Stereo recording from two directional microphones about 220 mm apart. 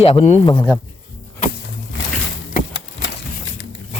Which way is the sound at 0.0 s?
30° left (ahead or behind).